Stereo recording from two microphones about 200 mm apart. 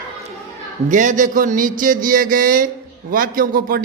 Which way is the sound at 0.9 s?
40° right (ahead or behind).